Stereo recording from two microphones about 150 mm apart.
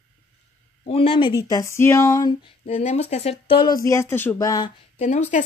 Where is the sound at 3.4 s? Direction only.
35° left (ahead or behind).